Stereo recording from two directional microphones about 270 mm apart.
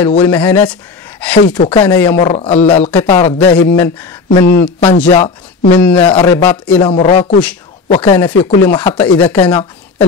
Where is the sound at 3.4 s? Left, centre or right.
Centre.